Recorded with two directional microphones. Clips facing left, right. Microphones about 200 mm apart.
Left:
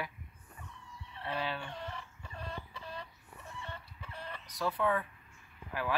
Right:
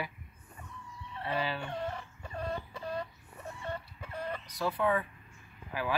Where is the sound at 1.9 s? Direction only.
45° right (ahead or behind).